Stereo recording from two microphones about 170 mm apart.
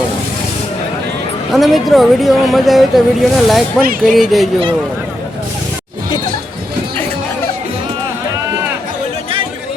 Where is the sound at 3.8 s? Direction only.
55° right (ahead or behind).